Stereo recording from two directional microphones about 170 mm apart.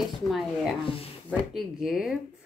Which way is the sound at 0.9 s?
35° left (ahead or behind).